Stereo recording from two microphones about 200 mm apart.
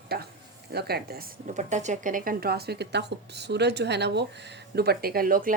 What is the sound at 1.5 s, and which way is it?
A woman's voice, 35° right (ahead or behind).